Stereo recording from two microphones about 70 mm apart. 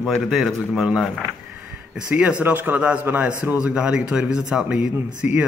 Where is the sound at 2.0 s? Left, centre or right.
Right.